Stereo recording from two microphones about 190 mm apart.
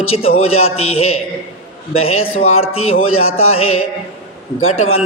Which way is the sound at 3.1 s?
90° left.